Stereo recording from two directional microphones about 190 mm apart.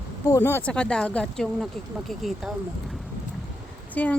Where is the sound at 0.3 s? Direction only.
15° left (ahead or behind).